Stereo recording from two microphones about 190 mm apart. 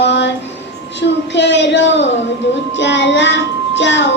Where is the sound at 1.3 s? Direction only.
70° left (ahead or behind).